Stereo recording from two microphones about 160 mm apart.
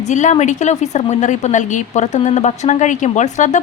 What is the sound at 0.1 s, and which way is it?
A woman's voice, 50° left (ahead or behind).